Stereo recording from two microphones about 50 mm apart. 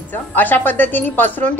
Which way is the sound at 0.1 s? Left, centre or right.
Left.